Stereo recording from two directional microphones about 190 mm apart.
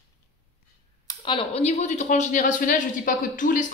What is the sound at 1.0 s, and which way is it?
Speech, 25° left (ahead or behind).